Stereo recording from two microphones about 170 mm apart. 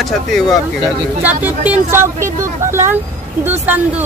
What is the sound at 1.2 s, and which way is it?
Speech, 10° right (ahead or behind).